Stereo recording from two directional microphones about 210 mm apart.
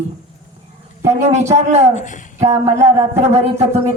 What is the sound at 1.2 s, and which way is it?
Speech, 30° right (ahead or behind).